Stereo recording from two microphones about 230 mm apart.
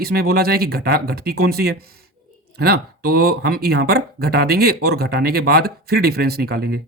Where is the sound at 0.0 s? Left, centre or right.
Right.